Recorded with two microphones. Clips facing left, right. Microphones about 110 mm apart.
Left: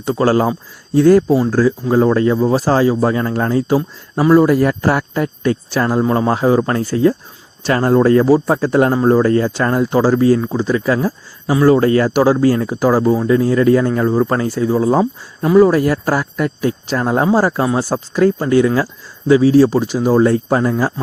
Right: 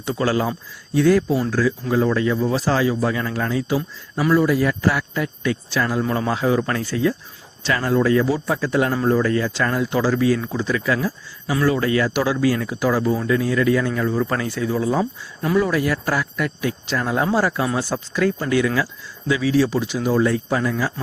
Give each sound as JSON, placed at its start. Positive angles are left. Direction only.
{"t": 0.0, "sound": "speech", "side_deg": 40}